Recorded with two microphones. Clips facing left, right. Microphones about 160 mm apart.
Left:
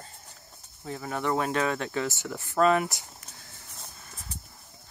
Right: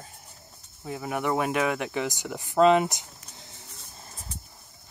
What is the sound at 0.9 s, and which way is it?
Speech, 10° right (ahead or behind).